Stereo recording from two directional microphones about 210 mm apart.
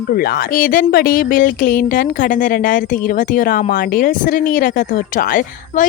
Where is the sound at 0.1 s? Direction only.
45° left (ahead or behind).